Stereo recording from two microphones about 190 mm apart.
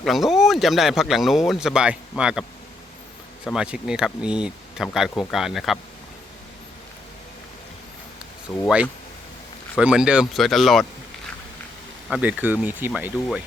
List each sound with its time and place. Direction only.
0.0 s speech: centre (ahead or behind)
3.4 s speech: 5° right (ahead or behind)
8.5 s speech: 10° left (ahead or behind)
9.7 s speech: 5° right (ahead or behind)
12.0 s speech: 5° right (ahead or behind)